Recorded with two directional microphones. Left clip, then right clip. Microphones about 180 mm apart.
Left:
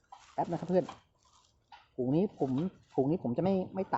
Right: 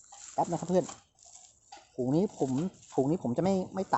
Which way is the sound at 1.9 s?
35° right (ahead or behind).